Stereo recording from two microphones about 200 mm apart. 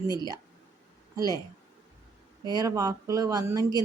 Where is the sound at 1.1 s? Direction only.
15° right (ahead or behind).